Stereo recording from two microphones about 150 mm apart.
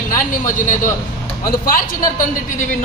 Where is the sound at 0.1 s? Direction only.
60° left (ahead or behind).